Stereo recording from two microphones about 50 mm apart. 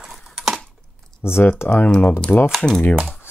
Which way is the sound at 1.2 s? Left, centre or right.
Left.